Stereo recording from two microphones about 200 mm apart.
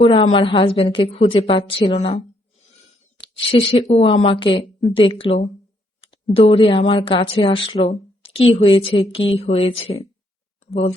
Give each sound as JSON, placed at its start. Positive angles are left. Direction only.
{"t": 0.0, "sound": "speech", "side_deg": 25}